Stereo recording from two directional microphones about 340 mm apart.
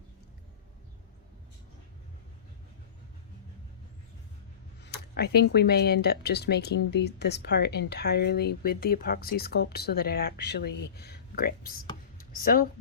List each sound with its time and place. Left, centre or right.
4.8 s speech: left